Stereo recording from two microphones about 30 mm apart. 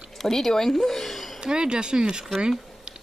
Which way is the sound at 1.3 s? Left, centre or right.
Right.